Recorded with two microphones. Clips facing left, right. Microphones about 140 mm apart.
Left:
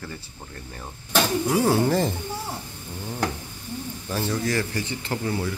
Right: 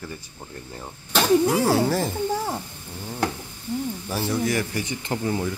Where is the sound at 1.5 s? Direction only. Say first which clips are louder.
Even; 15° left (ahead or behind).